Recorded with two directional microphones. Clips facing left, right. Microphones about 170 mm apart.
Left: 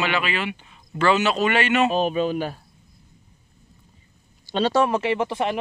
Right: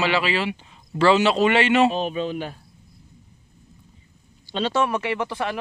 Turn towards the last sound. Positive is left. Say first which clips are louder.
# left 3 dB
turn(degrees=25)  # may be behind; listen again after turning